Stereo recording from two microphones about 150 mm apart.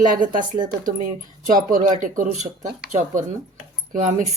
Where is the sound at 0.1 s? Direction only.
65° right (ahead or behind).